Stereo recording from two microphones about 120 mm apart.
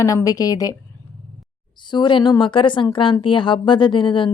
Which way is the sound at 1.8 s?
40° left (ahead or behind).